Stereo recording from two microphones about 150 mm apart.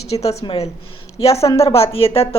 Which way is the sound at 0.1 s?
45° left (ahead or behind).